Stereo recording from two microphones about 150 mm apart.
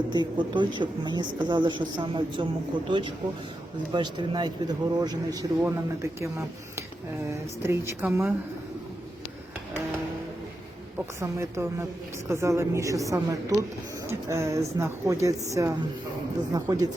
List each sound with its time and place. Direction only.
0.1 s speech: 30° right (ahead or behind)
3.9 s speech: 30° right (ahead or behind)
7.6 s speech: 20° right (ahead or behind)
11.2 s speech: 20° right (ahead or behind)